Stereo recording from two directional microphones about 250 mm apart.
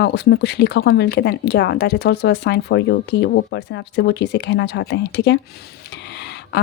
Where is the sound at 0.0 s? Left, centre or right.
Left.